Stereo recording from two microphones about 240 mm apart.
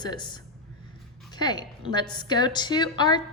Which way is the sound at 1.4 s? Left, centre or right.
Centre.